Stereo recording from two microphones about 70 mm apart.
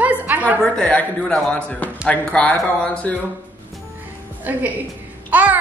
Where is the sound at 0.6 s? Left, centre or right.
Centre.